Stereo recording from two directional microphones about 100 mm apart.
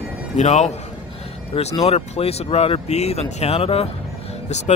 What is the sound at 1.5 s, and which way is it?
Speech, 80° left.